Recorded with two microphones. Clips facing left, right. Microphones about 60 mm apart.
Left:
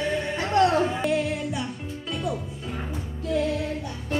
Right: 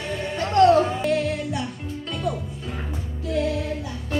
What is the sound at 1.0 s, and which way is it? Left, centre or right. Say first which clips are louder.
Music: right 2 dB; centre.